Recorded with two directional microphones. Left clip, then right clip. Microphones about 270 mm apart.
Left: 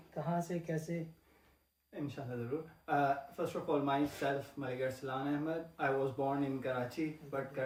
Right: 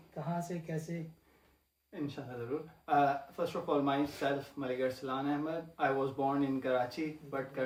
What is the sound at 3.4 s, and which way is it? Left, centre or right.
Speech, right.